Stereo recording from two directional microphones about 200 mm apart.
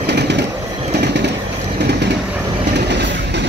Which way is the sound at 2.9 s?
60° right (ahead or behind).